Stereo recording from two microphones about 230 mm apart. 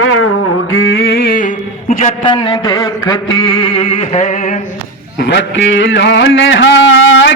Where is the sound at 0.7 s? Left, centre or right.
Left.